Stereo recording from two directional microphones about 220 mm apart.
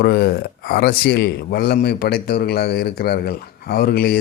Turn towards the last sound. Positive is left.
turn(degrees=45)  # may be behind; listen again after turning